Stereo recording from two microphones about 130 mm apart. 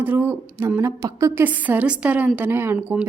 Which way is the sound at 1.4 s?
15° right (ahead or behind).